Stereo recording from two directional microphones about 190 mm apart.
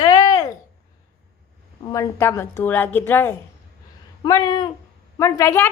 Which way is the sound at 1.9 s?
15° left (ahead or behind).